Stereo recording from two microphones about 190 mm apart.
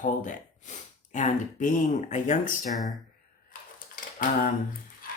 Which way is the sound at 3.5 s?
45° left (ahead or behind).